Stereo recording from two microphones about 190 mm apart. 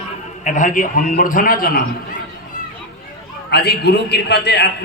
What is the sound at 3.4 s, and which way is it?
A man's voice, 60° left (ahead or behind).